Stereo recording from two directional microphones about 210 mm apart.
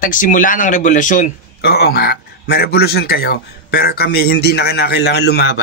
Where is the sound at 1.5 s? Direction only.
50° left (ahead or behind).